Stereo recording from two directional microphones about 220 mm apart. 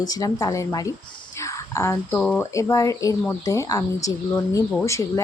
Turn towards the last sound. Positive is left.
turn(degrees=10)  # may be behind; listen again after turning